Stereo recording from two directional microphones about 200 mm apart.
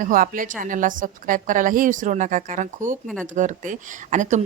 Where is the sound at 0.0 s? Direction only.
45° right (ahead or behind).